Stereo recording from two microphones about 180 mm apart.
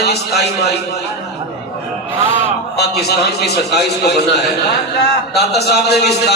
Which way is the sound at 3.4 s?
65° left (ahead or behind).